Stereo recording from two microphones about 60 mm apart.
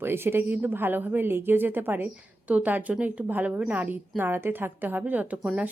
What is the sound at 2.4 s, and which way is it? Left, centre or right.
Speech, right.